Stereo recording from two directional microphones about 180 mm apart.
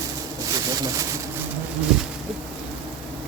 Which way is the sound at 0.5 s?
20° right (ahead or behind).